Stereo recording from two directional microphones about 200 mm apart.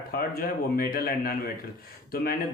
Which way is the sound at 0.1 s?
50° left (ahead or behind).